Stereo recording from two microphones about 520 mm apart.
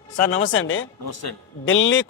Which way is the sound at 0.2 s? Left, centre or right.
Left.